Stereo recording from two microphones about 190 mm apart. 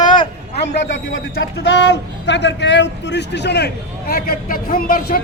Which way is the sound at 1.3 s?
65° left (ahead or behind).